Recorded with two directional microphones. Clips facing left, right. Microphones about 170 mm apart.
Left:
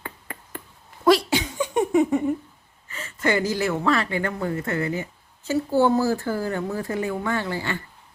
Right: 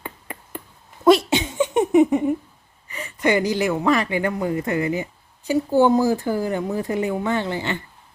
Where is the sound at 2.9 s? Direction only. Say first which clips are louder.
Right 3 dB; 15° right (ahead or behind).